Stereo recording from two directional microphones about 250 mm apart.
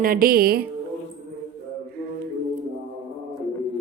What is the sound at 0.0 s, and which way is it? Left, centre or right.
Speech, right.